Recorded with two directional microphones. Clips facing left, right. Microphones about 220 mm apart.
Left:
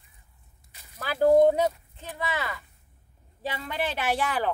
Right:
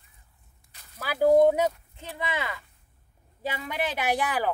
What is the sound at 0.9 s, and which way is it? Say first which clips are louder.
Speech: even; 10° right (ahead or behind).